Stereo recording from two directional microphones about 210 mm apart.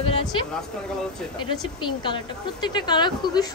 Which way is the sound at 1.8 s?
20° left (ahead or behind).